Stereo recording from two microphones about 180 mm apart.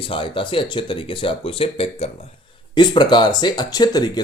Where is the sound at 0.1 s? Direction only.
30° left (ahead or behind).